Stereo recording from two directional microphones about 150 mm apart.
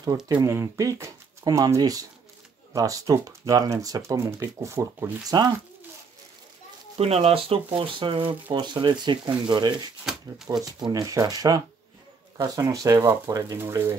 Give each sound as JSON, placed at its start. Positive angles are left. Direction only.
{"t": 0.3, "sound": "speech", "side_deg": -20}
{"t": 5.3, "sound": "speech", "side_deg": -30}
{"t": 7.0, "sound": "speech", "side_deg": -45}
{"t": 10.0, "sound": "speech", "side_deg": -5}
{"t": 10.6, "sound": "speech", "side_deg": -25}